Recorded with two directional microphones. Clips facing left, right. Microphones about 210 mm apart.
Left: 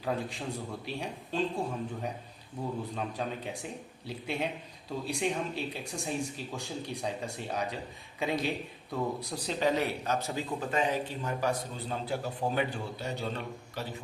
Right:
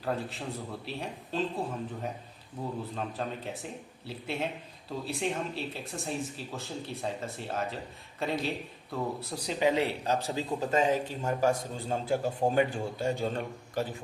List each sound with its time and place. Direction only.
0.0 s a man's voice: centre (ahead or behind)
9.6 s a man's voice: 25° right (ahead or behind); by 13.8 s 50° right (ahead or behind)